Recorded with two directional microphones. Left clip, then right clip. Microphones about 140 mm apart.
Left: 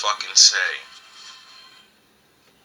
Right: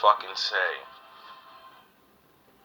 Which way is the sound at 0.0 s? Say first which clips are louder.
Left 5 dB; 45° right (ahead or behind).